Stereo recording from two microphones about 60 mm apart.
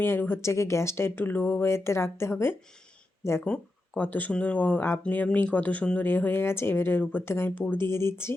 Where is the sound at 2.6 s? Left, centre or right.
Centre.